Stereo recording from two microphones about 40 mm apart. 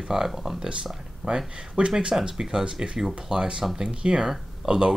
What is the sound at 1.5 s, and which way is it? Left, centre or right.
Speech, right.